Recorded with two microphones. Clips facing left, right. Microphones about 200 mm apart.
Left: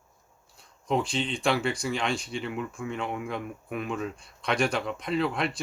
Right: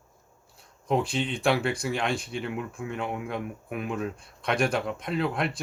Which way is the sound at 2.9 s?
5° right (ahead or behind).